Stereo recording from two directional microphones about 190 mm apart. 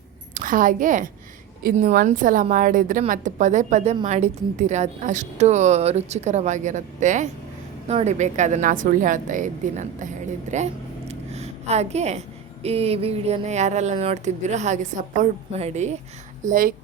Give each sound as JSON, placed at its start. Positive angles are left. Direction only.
{"t": 0.3, "sound": "a woman's voice", "side_deg": -45}
{"t": 11.1, "sound": "a sound", "side_deg": -35}
{"t": 12.6, "sound": "a woman's voice", "side_deg": -30}